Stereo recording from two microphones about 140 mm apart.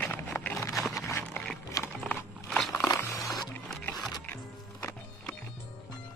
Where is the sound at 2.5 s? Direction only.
Centre (ahead or behind).